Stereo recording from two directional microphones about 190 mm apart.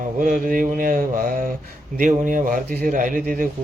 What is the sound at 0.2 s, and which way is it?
Speech, 45° right (ahead or behind).